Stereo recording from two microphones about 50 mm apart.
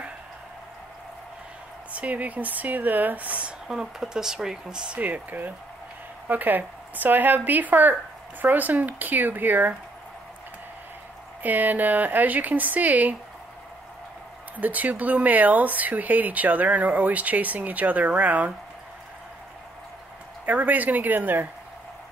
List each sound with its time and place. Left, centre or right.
1.9 s speech: right
3.6 s speech: centre
5.0 s speech: right
11.4 s speech: right
14.6 s speech: right
20.4 s speech: right